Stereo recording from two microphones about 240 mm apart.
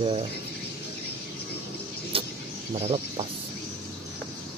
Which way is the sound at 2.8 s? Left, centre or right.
Right.